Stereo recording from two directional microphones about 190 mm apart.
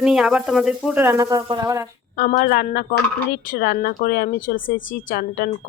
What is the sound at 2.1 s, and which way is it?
Speech, 50° left (ahead or behind).